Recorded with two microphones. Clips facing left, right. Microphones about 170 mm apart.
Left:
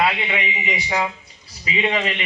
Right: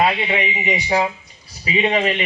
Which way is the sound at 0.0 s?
25° right (ahead or behind).